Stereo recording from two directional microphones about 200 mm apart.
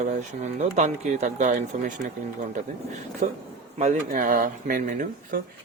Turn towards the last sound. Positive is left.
turn(degrees=-45)  # may be behind; listen again after turning